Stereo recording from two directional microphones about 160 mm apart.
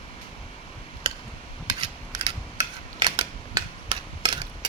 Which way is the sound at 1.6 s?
25° right (ahead or behind).